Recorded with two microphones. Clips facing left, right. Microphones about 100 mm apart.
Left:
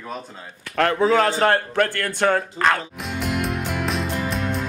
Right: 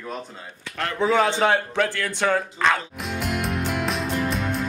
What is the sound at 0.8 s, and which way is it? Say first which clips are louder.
Speech: left 9 dB; 70° left (ahead or behind).